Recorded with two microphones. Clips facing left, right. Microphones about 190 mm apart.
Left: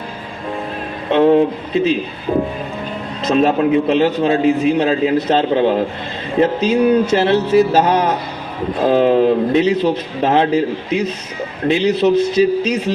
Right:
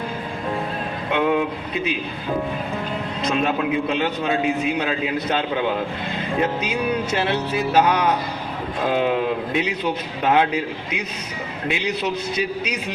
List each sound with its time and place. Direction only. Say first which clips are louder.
1.1 s a man's voice: left 9 dB; 35° left (ahead or behind)
3.3 s a man's voice: left 9 dB; 35° left (ahead or behind)